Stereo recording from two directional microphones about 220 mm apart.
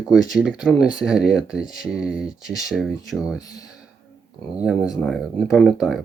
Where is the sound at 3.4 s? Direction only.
15° left (ahead or behind).